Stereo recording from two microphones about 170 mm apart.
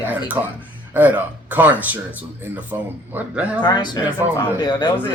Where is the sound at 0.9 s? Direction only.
10° right (ahead or behind).